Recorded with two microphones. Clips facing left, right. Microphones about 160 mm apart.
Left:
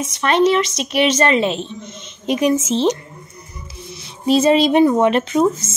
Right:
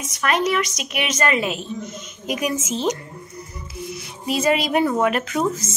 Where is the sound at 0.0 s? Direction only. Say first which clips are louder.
Left 6 dB; 25° left (ahead or behind).